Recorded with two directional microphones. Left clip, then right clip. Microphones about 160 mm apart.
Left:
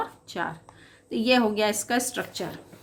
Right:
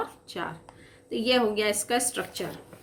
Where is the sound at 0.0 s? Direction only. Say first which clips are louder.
Left 3 dB; 30° left (ahead or behind).